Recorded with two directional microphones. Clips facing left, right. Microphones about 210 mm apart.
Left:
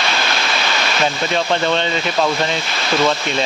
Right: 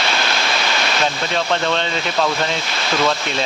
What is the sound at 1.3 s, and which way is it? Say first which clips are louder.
Speech: left 2 dB; 5° left (ahead or behind).